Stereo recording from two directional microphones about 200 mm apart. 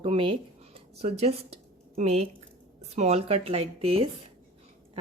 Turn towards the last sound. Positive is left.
turn(degrees=-30)  # may be behind; listen again after turning